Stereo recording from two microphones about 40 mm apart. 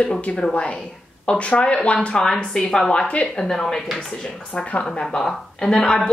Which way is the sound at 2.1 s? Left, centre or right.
Centre.